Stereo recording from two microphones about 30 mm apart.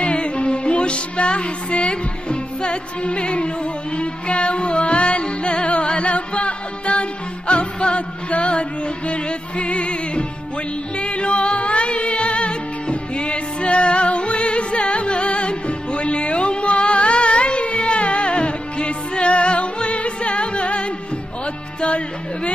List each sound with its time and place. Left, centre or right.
0.0 s music: left
21.8 s music: left